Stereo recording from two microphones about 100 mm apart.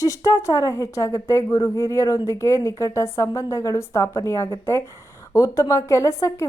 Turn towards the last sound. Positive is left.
turn(degrees=30)  # may be behind; listen again after turning